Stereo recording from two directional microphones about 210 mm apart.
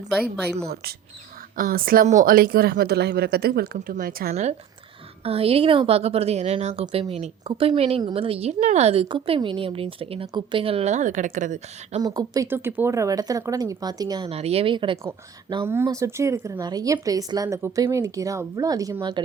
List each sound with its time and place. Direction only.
1.5 s a woman's voice: 40° right (ahead or behind)
5.2 s a woman's voice: 25° right (ahead or behind)
12.0 s speech: 15° right (ahead or behind)